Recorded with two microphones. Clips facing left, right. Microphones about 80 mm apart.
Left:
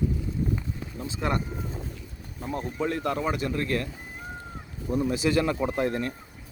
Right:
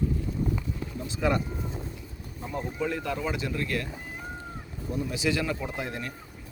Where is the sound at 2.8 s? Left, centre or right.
Left.